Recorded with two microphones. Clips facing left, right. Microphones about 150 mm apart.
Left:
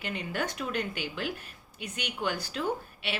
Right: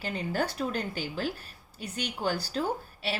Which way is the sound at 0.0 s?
35° right (ahead or behind).